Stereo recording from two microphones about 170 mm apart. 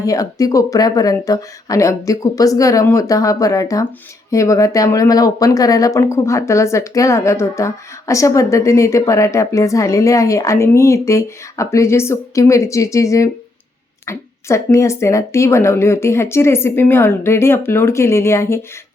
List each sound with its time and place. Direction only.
0.0 s speech: 20° left (ahead or behind)